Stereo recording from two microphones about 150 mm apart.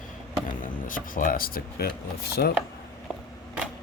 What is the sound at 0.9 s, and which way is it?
Speech, 65° left (ahead or behind).